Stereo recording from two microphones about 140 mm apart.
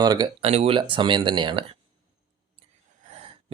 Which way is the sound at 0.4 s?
45° right (ahead or behind).